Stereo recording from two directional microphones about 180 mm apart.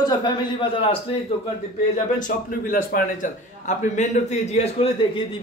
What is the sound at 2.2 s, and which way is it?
A man's voice, 50° left (ahead or behind).